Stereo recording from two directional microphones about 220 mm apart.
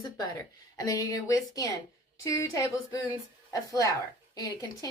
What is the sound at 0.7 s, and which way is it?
Speech, 15° left (ahead or behind).